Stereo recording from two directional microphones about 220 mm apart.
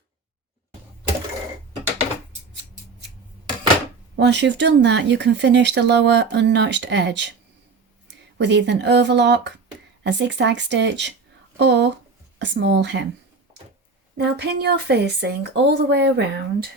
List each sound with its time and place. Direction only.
4.2 s speech: 50° right (ahead or behind)
14.2 s speech: 50° right (ahead or behind)